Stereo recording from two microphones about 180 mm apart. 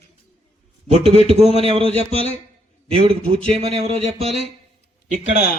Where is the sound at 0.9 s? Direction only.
35° right (ahead or behind).